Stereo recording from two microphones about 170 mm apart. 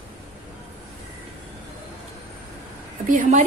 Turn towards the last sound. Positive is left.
turn(degrees=-45)  # may be behind; listen again after turning